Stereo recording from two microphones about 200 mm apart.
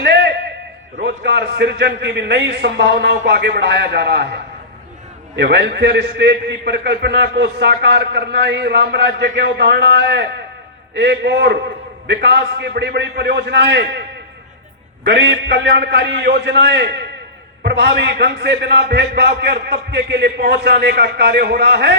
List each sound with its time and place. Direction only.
0.0 s a sound: 55° right (ahead or behind)
1.0 s a man's voice: 60° right (ahead or behind)
5.4 s a man's voice: 60° right (ahead or behind)
15.0 s a man's voice: 60° right (ahead or behind)